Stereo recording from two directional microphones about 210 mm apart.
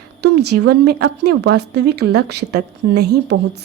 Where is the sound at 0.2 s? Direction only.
55° right (ahead or behind).